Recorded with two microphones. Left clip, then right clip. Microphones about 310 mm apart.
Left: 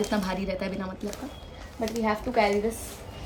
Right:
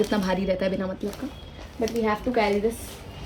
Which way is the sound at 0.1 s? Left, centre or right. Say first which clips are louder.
Right 4 dB; left.